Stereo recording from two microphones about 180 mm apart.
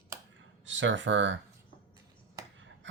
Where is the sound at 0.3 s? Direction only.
90° right.